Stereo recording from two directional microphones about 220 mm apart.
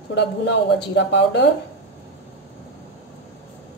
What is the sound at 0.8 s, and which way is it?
Speech, 50° left (ahead or behind).